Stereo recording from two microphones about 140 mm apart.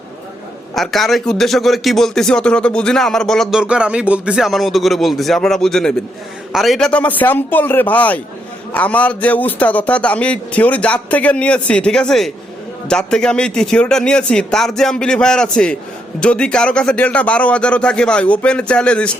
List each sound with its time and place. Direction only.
0.7 s a man's voice: centre (ahead or behind)